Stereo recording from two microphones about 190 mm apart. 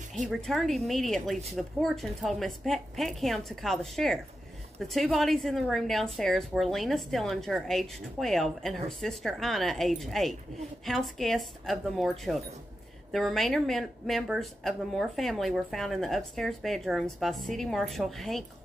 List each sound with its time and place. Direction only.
0.3 s a woman's voice: centre (ahead or behind)